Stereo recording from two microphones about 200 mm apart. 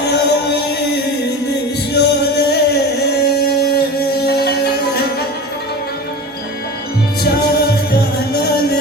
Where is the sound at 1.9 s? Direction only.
55° left (ahead or behind).